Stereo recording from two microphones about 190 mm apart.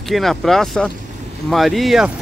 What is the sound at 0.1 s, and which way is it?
Speech, centre (ahead or behind).